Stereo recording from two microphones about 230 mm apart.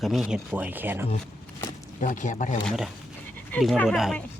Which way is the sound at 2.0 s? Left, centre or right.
Left.